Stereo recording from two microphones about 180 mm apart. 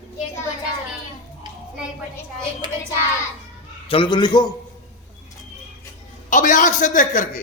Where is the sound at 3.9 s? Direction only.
25° left (ahead or behind).